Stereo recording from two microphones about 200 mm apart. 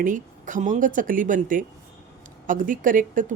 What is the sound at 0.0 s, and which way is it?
Speech, 40° right (ahead or behind).